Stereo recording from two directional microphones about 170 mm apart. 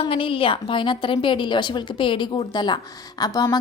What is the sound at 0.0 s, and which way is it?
A woman's voice, 30° left (ahead or behind).